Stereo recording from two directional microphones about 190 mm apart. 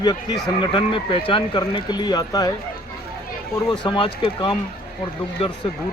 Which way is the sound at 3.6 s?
25° left (ahead or behind).